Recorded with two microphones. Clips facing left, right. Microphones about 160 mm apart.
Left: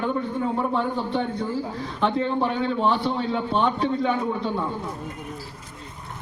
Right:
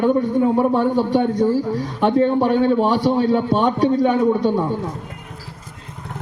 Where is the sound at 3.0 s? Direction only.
40° right (ahead or behind).